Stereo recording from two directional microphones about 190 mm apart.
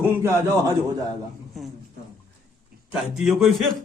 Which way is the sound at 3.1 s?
Centre (ahead or behind).